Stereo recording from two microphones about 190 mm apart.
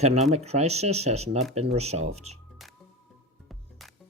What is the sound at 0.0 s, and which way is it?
Speech, 35° right (ahead or behind).